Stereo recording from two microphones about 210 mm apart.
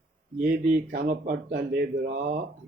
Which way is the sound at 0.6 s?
45° right (ahead or behind).